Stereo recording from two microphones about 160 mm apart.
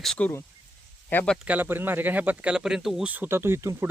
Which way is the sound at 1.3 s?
10° right (ahead or behind).